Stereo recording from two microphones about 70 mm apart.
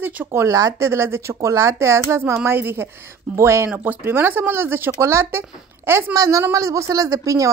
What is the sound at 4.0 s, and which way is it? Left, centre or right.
Speech, right.